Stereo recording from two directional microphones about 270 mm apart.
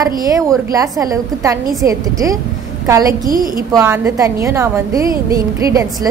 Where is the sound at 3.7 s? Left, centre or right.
Centre.